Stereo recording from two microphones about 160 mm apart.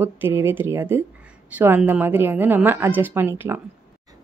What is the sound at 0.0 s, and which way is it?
A woman's voice, 15° right (ahead or behind).